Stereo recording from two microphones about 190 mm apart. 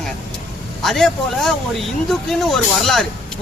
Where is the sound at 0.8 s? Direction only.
Centre (ahead or behind).